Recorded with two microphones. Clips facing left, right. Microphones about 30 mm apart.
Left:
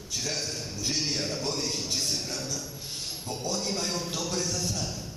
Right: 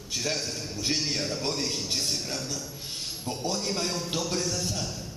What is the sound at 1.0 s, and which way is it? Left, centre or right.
Speech, centre.